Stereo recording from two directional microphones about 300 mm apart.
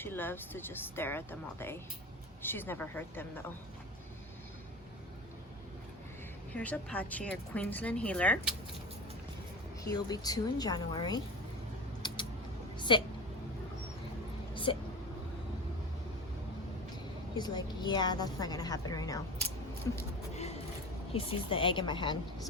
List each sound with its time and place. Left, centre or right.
0.0 s a woman's voice: centre
6.5 s speech: centre
9.8 s a woman's voice: centre
12.9 s a woman's voice: centre
14.5 s a sound: centre
17.3 s a woman's voice: centre
21.1 s a woman's voice: centre